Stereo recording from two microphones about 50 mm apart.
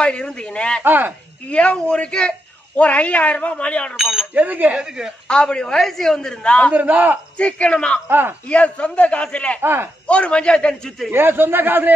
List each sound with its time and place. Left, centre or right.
0.0 s a man's voice: centre
0.8 s speech: right
1.5 s a man's voice: left
3.9 s speech: centre
4.3 s speech: right
4.7 s speech: centre
5.3 s a man's voice: centre
6.7 s speech: right
7.3 s a man's voice: left
8.1 s a man's voice: right
8.5 s a man's voice: left
9.6 s a man's voice: right
10.0 s a man's voice: left
11.1 s a man's voice: right